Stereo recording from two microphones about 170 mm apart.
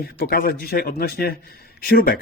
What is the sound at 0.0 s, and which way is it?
A man's voice, 65° left (ahead or behind).